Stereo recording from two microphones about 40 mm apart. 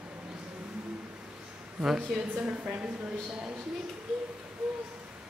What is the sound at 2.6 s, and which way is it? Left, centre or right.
Speech, right.